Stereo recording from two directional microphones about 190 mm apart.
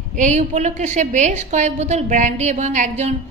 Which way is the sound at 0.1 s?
40° right (ahead or behind).